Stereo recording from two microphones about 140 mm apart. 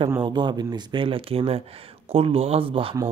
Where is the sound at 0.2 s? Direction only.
30° right (ahead or behind).